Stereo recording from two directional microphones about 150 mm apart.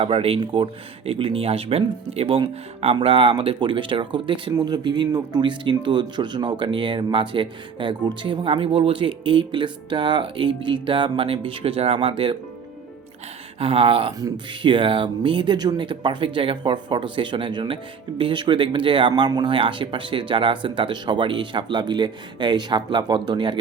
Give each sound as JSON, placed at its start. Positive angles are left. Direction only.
{"t": 0.0, "sound": "speech", "side_deg": -40}
{"t": 13.6, "sound": "speech", "side_deg": -40}
{"t": 14.1, "sound": "speech", "side_deg": -25}